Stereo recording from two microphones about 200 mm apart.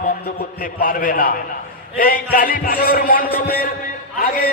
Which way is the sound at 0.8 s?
45° left (ahead or behind).